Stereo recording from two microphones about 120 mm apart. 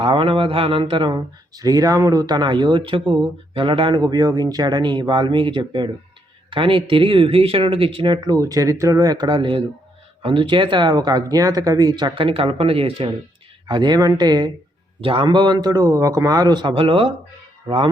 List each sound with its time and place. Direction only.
0.0 s speech: 45° right (ahead or behind)
13.7 s speech: 40° right (ahead or behind)
15.0 s speech: 45° right (ahead or behind)